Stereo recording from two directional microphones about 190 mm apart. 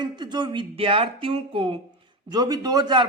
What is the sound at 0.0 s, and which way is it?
Speech, 25° right (ahead or behind).